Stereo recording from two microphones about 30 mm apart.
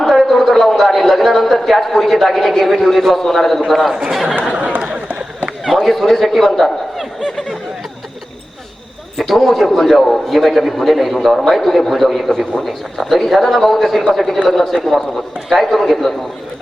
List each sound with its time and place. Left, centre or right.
0.0 s a man's voice: centre
4.5 s chatter: right
5.6 s a man's voice: centre
9.1 s a man's voice: centre